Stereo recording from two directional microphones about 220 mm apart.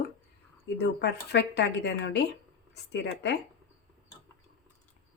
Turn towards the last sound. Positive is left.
turn(degrees=50)  # may be behind; listen again after turning